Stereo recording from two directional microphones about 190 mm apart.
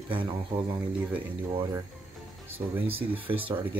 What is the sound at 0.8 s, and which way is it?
Speech, 5° right (ahead or behind).